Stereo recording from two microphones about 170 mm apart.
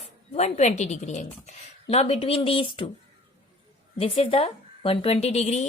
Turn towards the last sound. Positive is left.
turn(degrees=40)  # may be behind; listen again after turning